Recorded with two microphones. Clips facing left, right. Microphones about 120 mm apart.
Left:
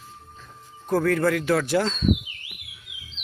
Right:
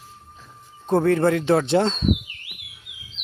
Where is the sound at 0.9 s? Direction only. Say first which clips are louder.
Right 3 dB; 25° right (ahead or behind).